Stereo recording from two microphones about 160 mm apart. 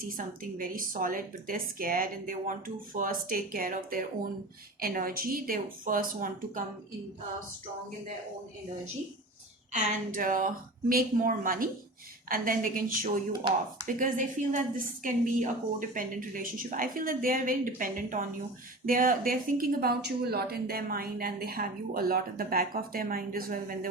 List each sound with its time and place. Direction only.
0.6 s speech: 60° right (ahead or behind)
9.7 s speech: 60° right (ahead or behind)
13.5 s speech: 30° right (ahead or behind)
13.8 s a woman's voice: 55° right (ahead or behind)